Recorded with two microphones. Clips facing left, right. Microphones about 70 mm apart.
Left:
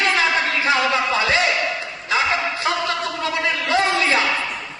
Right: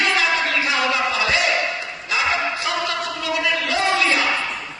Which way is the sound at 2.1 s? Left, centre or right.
Left.